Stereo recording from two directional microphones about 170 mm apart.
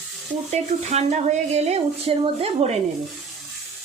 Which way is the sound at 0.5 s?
40° right (ahead or behind).